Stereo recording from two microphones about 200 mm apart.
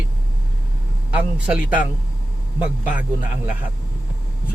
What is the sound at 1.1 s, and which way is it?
Speech, 5° right (ahead or behind).